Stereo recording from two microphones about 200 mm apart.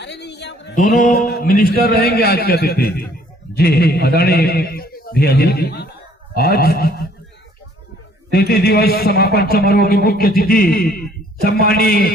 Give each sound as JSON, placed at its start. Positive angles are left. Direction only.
{"t": 0.0, "sound": "a sound", "side_deg": 60}
{"t": 0.8, "sound": "a man's voice", "side_deg": 40}
{"t": 8.3, "sound": "a man's voice", "side_deg": 50}